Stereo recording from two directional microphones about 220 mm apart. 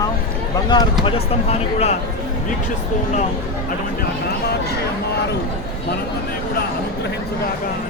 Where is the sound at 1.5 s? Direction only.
30° left (ahead or behind).